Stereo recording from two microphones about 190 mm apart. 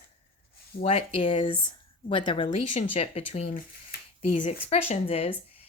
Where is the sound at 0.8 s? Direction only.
30° left (ahead or behind).